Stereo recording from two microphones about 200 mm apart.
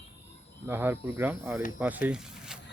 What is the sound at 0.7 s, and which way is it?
Speech, 10° right (ahead or behind).